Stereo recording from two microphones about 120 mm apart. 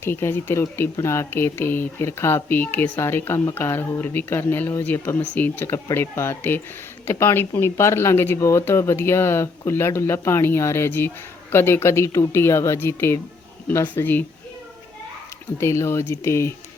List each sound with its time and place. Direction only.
0.0 s speech: 20° left (ahead or behind)
15.6 s speech: 25° left (ahead or behind)